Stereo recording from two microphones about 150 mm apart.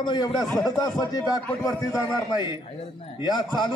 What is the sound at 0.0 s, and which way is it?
A man's voice, 30° left (ahead or behind).